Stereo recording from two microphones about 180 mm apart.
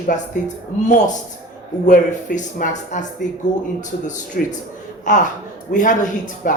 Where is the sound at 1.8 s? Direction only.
45° left (ahead or behind).